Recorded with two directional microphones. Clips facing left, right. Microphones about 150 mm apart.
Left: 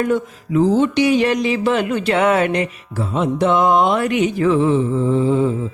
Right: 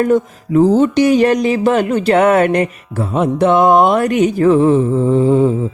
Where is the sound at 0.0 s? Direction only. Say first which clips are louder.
Right 5 dB; 45° right (ahead or behind).